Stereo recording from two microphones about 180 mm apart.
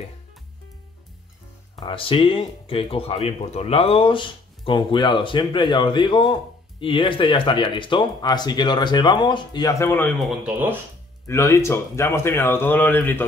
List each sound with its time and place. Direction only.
1.8 s speech: 30° left (ahead or behind); by 10.1 s 10° left (ahead or behind)
10.1 s speech: centre (ahead or behind)
11.2 s speech: 15° left (ahead or behind)